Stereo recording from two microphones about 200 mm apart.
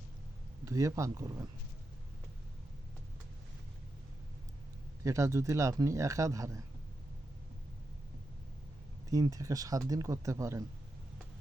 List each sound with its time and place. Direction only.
0.6 s a man's voice: 15° right (ahead or behind)
5.0 s a man's voice: 15° right (ahead or behind)
9.0 s a man's voice: 15° right (ahead or behind)